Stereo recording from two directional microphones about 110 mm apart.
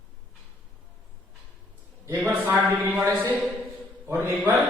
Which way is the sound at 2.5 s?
30° right (ahead or behind).